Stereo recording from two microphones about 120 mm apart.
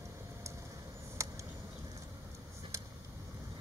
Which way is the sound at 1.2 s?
25° right (ahead or behind).